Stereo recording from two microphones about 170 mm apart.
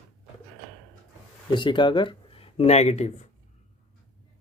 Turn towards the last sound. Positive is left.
turn(degrees=40)  # may be behind; listen again after turning